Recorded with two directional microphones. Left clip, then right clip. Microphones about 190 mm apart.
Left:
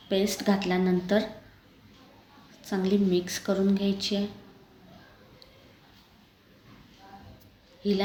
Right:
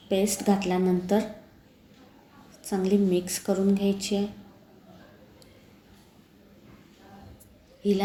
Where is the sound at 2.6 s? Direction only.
5° right (ahead or behind).